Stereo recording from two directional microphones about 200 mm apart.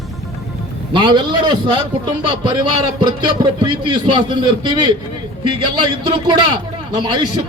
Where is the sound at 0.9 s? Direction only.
25° right (ahead or behind).